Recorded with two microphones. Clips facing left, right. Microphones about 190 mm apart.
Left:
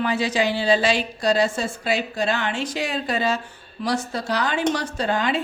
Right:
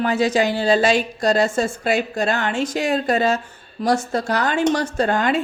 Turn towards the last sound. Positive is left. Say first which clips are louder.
# right 4 dB
turn(degrees=-50)  # may be behind; listen again after turning